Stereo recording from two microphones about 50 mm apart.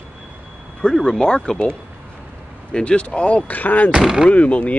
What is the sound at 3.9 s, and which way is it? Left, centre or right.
Speech, centre.